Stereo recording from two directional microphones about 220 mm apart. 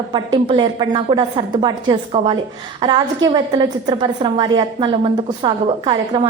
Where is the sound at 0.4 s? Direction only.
20° right (ahead or behind).